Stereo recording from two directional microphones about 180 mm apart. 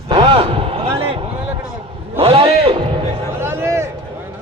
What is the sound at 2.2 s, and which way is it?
Speech, 30° right (ahead or behind).